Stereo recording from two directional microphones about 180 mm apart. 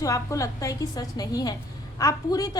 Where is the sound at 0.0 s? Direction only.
15° left (ahead or behind).